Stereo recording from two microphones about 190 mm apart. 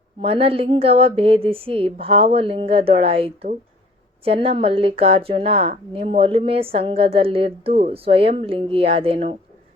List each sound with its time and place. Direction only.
0.2 s a woman's voice: 30° right (ahead or behind)